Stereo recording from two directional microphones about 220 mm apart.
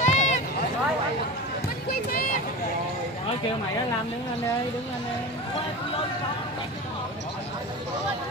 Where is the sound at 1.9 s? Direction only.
40° left (ahead or behind).